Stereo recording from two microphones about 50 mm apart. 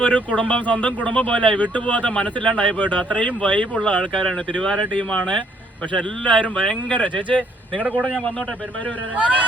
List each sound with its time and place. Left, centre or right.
0.0 s speech: left
9.1 s speech: right